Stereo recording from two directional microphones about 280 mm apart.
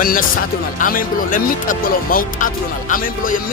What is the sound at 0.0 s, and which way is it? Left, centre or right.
A man's voice, left.